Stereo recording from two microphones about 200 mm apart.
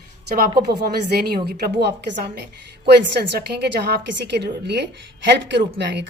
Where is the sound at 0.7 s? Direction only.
50° right (ahead or behind).